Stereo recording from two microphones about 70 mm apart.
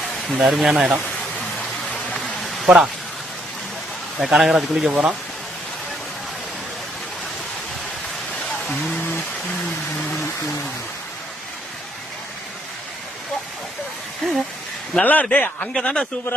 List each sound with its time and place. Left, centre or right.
0.3 s speech: centre
1.9 s a sound: centre
2.4 s a sound: centre
4.2 s speech: centre
14.2 s speech: centre
15.0 s a man's voice: left